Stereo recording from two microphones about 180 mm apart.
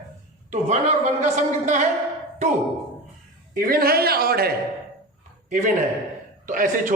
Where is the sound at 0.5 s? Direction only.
40° right (ahead or behind).